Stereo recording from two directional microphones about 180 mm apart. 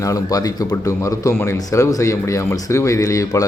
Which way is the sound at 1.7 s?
15° left (ahead or behind).